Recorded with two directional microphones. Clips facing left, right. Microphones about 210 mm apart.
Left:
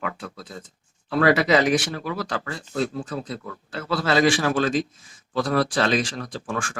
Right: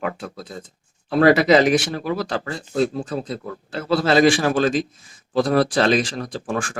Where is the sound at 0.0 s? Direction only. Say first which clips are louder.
Right 4 dB; 30° right (ahead or behind).